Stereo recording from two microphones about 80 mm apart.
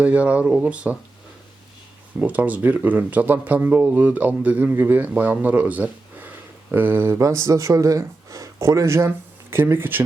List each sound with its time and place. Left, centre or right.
0.0 s speech: centre
2.1 s speech: centre
7.2 s speech: right